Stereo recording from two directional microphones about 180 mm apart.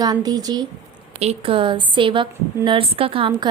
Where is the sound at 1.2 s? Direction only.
35° right (ahead or behind).